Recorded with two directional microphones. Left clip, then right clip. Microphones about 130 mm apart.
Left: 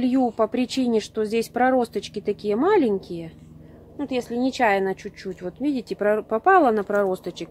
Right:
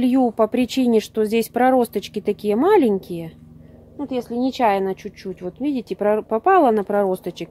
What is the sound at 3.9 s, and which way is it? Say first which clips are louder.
A woman's voice: right 1 dB; 30° right (ahead or behind).